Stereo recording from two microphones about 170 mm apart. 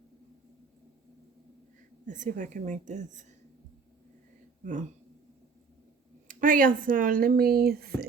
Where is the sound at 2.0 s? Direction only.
50° right (ahead or behind).